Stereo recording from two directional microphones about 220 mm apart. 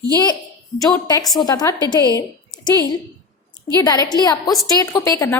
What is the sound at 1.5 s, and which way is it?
A woman's voice, 15° left (ahead or behind).